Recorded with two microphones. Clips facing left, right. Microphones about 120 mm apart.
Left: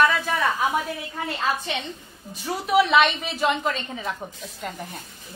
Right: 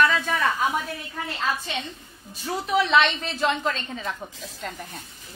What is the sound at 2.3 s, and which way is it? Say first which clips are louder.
A woman's voice: left 3 dB; 10° left (ahead or behind).